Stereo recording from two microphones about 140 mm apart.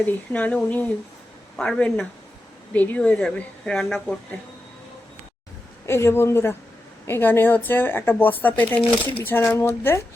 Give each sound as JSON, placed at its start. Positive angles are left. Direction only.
{"t": 0.0, "sound": "speech", "side_deg": 10}
{"t": 5.8, "sound": "speech", "side_deg": 20}